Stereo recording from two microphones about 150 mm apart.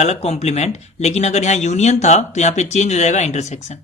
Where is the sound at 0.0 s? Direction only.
45° left (ahead or behind).